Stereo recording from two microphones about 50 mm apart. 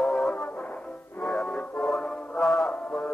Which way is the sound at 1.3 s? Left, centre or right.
Left.